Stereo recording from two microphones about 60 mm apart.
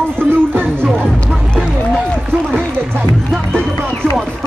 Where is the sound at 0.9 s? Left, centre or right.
Centre.